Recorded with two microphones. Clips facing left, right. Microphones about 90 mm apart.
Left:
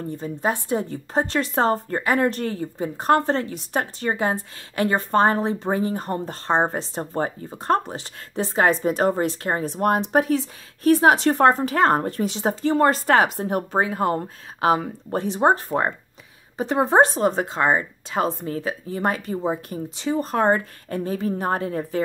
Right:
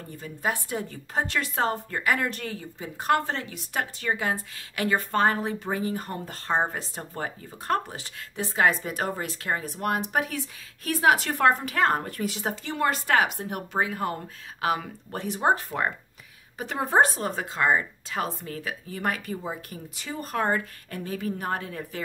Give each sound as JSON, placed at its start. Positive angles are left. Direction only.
{"t": 0.2, "sound": "a woman's voice", "side_deg": 30}